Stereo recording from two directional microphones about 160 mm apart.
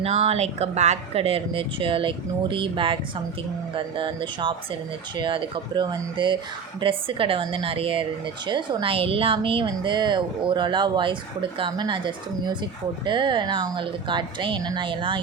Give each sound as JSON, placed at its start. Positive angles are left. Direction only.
{"t": 0.0, "sound": "a woman's voice", "side_deg": -40}